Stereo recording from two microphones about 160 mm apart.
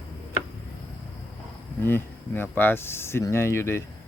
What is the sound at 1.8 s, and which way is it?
Speech, 15° left (ahead or behind).